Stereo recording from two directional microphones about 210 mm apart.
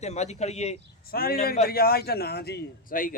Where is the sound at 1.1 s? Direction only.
45° left (ahead or behind).